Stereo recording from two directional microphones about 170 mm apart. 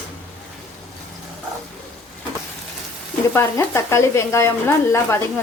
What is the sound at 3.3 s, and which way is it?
Speech, 15° left (ahead or behind).